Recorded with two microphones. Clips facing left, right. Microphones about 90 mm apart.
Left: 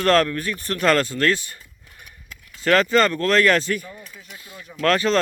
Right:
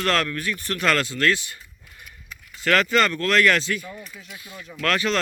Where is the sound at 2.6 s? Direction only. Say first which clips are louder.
Left 3 dB; 30° left (ahead or behind).